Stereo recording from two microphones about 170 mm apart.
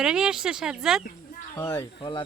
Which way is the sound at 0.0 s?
5° right (ahead or behind).